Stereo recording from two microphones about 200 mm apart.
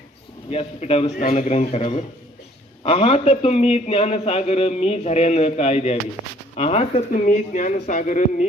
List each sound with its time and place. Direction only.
0.5 s a man's voice: 30° left (ahead or behind)